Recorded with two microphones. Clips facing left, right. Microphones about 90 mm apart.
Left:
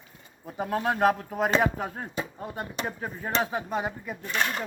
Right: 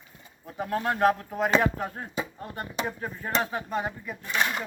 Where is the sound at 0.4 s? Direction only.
5° left (ahead or behind).